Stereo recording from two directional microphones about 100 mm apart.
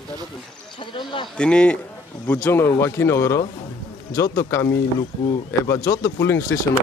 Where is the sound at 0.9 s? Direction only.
50° left (ahead or behind).